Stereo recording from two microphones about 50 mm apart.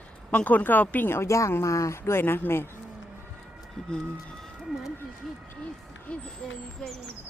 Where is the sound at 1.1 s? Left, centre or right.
Left.